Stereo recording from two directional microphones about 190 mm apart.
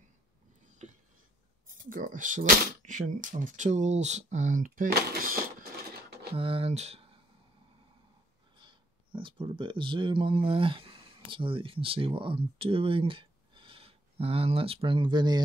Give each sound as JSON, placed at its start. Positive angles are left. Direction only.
{"t": 0.7, "sound": "a sound", "side_deg": -40}
{"t": 1.9, "sound": "speech", "side_deg": -45}
{"t": 6.3, "sound": "speech", "side_deg": -30}
{"t": 8.5, "sound": "speech", "side_deg": -25}